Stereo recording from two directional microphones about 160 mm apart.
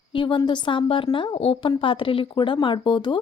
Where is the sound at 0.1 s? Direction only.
30° left (ahead or behind).